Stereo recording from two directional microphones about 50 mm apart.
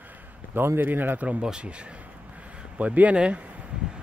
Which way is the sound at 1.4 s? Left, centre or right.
Centre.